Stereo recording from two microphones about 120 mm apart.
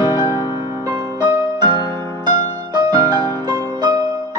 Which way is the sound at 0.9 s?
30° right (ahead or behind).